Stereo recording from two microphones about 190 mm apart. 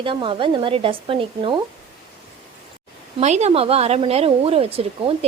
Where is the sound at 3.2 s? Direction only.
35° right (ahead or behind).